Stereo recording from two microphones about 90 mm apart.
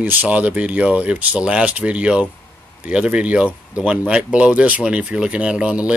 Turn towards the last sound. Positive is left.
turn(degrees=-10)  # may be behind; listen again after turning